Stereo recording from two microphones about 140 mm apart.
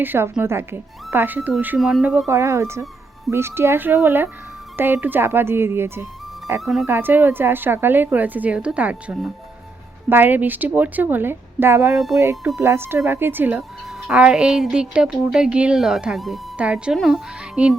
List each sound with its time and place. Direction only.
0.0 s a woman's voice: 15° right (ahead or behind)
2.3 s a woman's voice: 20° right (ahead or behind)
6.6 s a woman's voice: centre (ahead or behind)
6.8 s a woman's voice: 15° right (ahead or behind)
11.9 s a woman's voice: centre (ahead or behind)
12.5 s a woman's voice: 20° right (ahead or behind)